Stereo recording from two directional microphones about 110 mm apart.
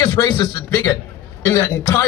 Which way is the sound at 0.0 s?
40° left (ahead or behind).